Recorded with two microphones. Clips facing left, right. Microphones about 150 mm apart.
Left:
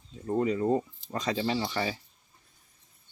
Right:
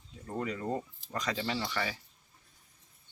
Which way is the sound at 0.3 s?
25° left (ahead or behind).